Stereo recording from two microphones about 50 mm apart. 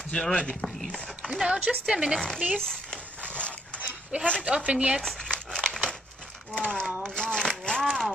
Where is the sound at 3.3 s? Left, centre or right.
Left.